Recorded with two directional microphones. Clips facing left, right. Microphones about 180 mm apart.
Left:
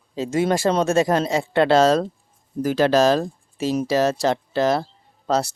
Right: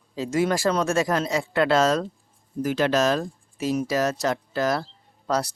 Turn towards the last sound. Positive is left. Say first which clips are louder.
# left 4 dB
turn(degrees=25)  # may be behind; listen again after turning